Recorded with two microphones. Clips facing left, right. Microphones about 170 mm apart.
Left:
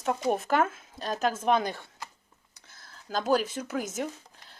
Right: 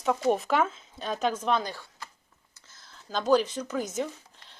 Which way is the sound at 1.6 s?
20° left (ahead or behind).